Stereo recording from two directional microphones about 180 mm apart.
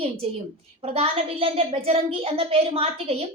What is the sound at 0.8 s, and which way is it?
Speech, 30° right (ahead or behind).